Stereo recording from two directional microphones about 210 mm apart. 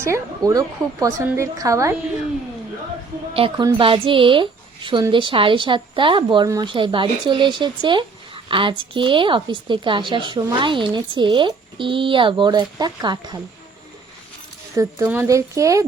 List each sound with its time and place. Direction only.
0.0 s speech: 15° right (ahead or behind)
3.3 s speech: 25° right (ahead or behind)
14.8 s speech: 10° right (ahead or behind)